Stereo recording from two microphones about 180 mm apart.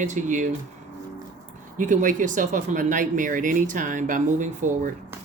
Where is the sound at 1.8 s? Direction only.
45° right (ahead or behind).